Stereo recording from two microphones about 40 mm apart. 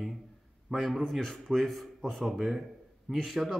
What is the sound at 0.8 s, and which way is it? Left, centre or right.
A man's voice, centre.